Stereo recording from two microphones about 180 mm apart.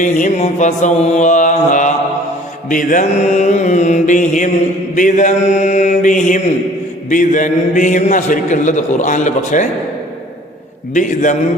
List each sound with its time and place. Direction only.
0.0 s a man's voice: 45° left (ahead or behind)
10.9 s a man's voice: 45° left (ahead or behind)